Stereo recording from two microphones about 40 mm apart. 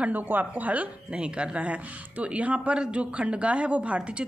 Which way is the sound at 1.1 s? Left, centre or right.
Right.